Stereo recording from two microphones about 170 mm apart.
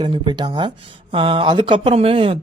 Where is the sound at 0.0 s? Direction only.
25° right (ahead or behind).